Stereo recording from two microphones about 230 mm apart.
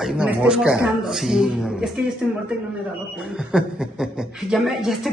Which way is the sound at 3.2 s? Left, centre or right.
Centre.